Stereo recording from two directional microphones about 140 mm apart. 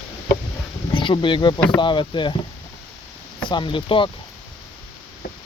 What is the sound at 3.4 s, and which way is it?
Speech, 35° left (ahead or behind).